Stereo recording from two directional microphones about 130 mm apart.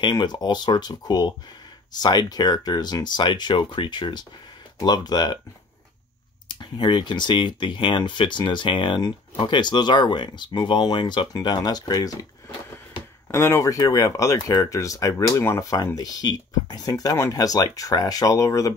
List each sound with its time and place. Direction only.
0.0 s speech: 35° left (ahead or behind)
6.5 s speech: 35° left (ahead or behind)
13.3 s speech: 25° left (ahead or behind)